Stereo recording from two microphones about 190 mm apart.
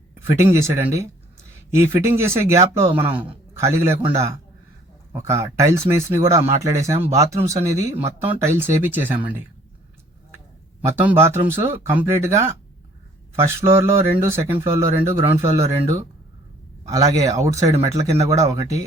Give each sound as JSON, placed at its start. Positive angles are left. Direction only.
{"t": 0.1, "sound": "speech", "side_deg": -10}
{"t": 5.1, "sound": "speech", "side_deg": -15}
{"t": 10.8, "sound": "speech", "side_deg": -10}